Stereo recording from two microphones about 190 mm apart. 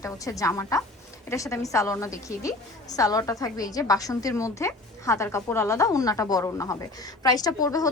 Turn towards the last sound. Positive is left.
turn(degrees=20)  # may be behind; listen again after turning